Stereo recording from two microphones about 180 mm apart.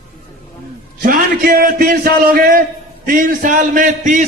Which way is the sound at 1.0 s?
55° right (ahead or behind).